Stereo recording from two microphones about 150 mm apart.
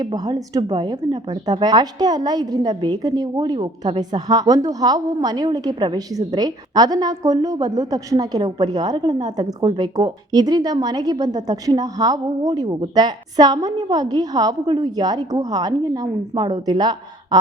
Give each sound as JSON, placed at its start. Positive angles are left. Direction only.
{"t": 0.0, "sound": "speech", "side_deg": -25}